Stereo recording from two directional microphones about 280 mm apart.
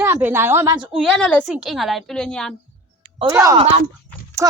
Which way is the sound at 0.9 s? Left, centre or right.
Centre.